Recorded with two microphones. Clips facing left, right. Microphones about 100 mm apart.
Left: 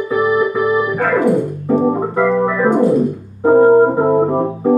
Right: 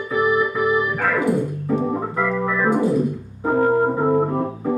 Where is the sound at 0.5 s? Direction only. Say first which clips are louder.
Left 5 dB; 25° left (ahead or behind).